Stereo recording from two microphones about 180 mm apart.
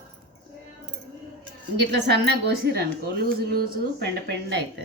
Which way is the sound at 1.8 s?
70° right (ahead or behind).